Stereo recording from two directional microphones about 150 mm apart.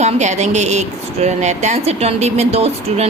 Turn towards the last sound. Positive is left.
turn(degrees=-45)  # may be behind; listen again after turning